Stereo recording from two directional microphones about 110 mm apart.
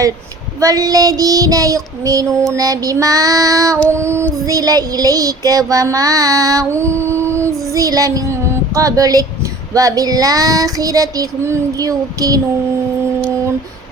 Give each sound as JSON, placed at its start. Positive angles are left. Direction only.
{"t": 0.6, "sound": "child singing", "side_deg": -35}